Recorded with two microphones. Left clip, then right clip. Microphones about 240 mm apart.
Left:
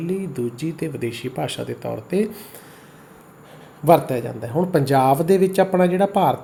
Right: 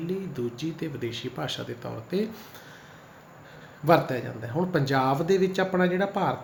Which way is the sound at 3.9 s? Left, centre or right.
Left.